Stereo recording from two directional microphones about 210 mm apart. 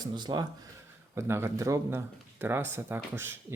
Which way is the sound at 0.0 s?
20° right (ahead or behind).